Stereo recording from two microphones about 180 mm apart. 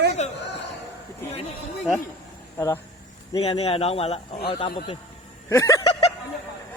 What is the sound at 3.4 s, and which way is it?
Speech, 35° left (ahead or behind).